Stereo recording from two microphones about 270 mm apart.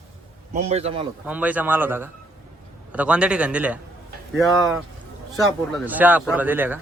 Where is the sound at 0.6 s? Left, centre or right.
Right.